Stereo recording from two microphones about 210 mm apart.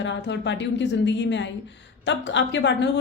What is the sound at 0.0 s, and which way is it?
A woman's voice, 55° left (ahead or behind).